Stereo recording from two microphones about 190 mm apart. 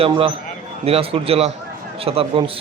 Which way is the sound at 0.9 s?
30° right (ahead or behind).